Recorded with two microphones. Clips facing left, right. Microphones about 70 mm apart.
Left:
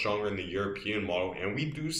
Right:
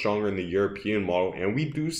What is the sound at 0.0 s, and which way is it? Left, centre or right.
Speech, right.